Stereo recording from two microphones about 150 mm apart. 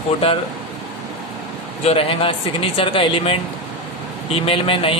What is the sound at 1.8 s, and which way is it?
A man's voice, 40° left (ahead or behind).